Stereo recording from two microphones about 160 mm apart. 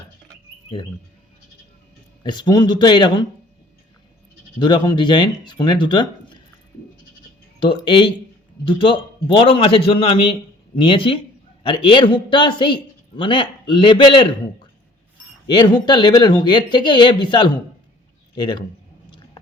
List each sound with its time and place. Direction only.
2.2 s speech: 30° left (ahead or behind)
4.6 s speech: 30° left (ahead or behind)
7.6 s a man's voice: 30° left (ahead or behind)